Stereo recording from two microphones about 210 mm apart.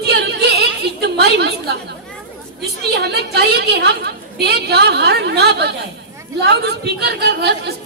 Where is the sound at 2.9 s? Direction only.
50° right (ahead or behind).